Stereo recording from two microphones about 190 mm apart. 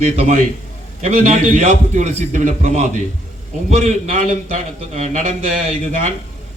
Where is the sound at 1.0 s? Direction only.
40° right (ahead or behind).